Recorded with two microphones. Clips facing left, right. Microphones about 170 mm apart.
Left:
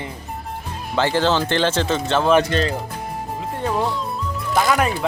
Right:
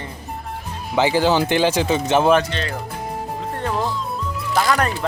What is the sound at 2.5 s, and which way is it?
Speech, 45° left (ahead or behind).